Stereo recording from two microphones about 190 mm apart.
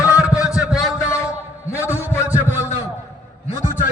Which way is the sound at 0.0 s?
5° right (ahead or behind).